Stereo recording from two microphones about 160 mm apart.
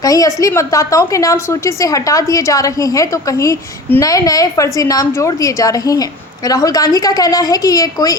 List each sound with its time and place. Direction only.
0.0 s a woman's voice: 20° left (ahead or behind)